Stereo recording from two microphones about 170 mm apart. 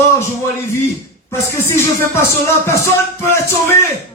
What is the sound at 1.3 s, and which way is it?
Speech, 15° left (ahead or behind).